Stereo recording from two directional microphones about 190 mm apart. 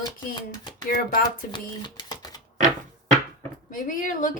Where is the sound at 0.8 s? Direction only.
50° left (ahead or behind).